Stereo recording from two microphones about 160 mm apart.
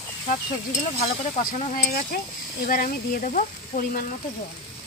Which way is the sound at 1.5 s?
45° left (ahead or behind).